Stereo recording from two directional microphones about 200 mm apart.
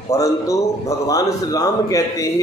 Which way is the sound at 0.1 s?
15° left (ahead or behind).